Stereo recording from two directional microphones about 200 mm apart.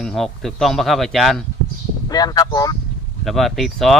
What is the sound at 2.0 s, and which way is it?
Speech, 20° left (ahead or behind).